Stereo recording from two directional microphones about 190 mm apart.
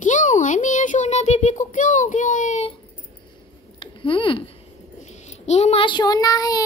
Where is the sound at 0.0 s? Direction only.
40° left (ahead or behind).